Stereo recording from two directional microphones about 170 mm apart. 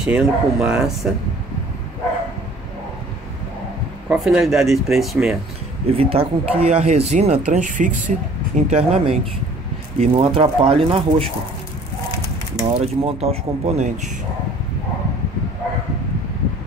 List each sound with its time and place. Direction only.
0.0 s speech: 5° right (ahead or behind)
4.1 s speech: 5° right (ahead or behind)
5.9 s speech: 35° right (ahead or behind)
12.7 s speech: 35° right (ahead or behind)